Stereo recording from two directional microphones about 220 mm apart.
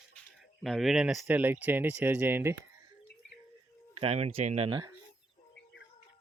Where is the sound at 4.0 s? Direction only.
25° right (ahead or behind).